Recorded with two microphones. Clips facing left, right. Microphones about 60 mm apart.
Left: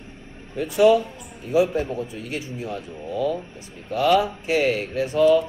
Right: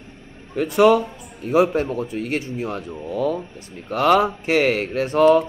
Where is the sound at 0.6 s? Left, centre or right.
Right.